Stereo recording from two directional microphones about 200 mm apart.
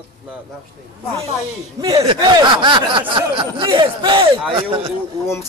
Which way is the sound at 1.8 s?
20° right (ahead or behind).